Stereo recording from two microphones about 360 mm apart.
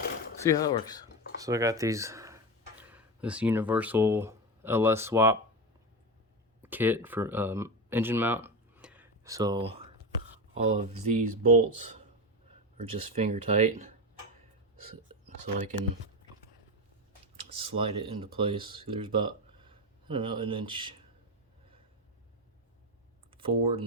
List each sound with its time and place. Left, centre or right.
0.6 s speech: centre
1.4 s speech: centre
6.6 s speech: centre
17.6 s speech: centre
23.4 s speech: centre